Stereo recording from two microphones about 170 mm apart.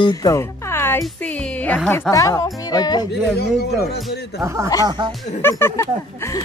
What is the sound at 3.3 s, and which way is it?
Speech, 70° left (ahead or behind).